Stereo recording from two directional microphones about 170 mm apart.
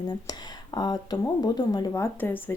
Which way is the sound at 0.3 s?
25° left (ahead or behind).